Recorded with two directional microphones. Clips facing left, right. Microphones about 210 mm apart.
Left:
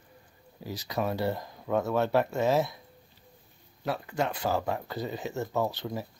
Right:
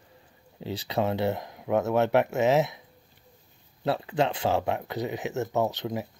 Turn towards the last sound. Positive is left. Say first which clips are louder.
# right 3 dB
turn(degrees=-20)  # may be behind; listen again after turning